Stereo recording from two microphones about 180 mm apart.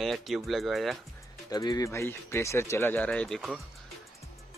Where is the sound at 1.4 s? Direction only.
20° left (ahead or behind); by 3.6 s centre (ahead or behind).